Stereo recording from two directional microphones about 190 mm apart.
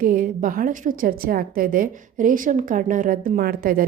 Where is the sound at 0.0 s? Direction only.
45° right (ahead or behind).